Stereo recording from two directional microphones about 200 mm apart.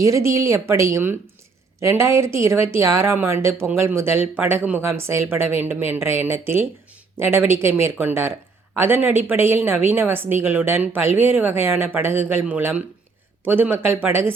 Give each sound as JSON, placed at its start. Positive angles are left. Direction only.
{"t": 0.0, "sound": "speech", "side_deg": -15}